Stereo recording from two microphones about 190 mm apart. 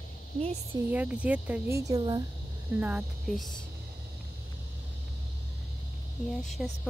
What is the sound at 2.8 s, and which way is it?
Speech, 5° right (ahead or behind).